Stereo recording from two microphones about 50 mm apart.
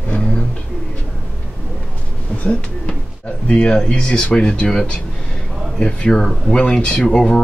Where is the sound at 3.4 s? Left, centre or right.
Left.